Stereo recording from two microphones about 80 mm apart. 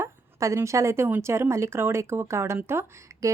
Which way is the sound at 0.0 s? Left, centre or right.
Right.